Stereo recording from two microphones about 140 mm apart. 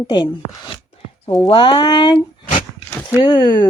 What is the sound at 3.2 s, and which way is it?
Speech, 35° left (ahead or behind).